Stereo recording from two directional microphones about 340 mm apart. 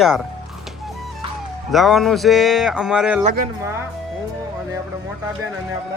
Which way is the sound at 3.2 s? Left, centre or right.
Right.